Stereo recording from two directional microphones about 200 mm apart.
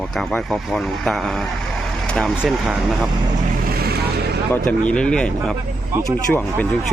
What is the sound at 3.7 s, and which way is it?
Vehicle, 50° right (ahead or behind).